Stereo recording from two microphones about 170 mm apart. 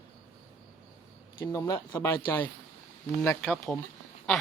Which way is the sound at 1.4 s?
20° left (ahead or behind).